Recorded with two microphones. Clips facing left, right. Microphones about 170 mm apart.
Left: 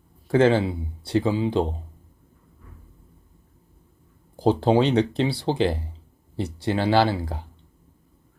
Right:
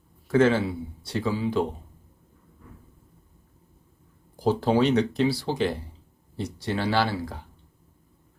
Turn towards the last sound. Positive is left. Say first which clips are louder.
# left 5 dB
turn(degrees=30)  # may be behind; listen again after turning